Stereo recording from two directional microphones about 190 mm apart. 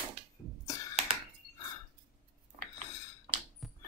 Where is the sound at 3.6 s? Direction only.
Centre (ahead or behind).